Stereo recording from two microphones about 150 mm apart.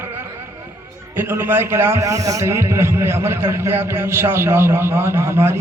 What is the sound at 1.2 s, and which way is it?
A man's voice, 15° right (ahead or behind).